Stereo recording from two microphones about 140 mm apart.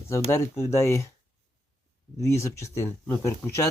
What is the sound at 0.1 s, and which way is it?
Speech, 20° left (ahead or behind).